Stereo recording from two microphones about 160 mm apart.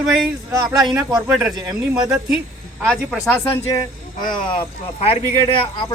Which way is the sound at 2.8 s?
5° left (ahead or behind).